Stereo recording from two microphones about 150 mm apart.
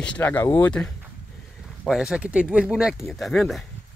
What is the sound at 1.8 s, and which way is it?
Speech, 5° right (ahead or behind).